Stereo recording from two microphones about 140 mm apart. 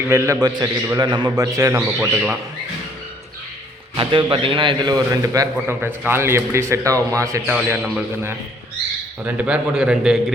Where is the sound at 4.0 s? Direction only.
35° right (ahead or behind).